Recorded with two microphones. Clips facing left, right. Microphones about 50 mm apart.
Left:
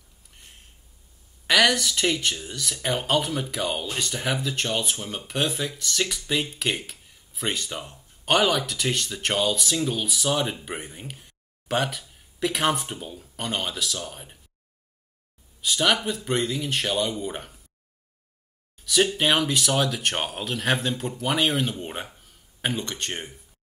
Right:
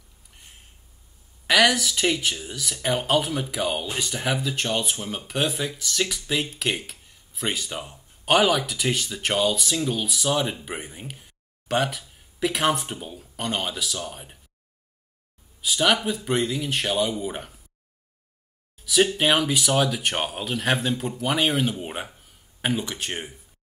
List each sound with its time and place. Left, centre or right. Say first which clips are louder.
0.3 s a sound: even; centre
1.5 s speech: right 1 dB; centre
15.6 s speech: right 1 dB; centre
18.9 s speech: right 1 dB; centre